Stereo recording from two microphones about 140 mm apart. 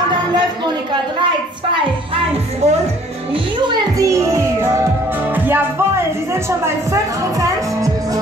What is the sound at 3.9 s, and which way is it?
Music, 25° right (ahead or behind).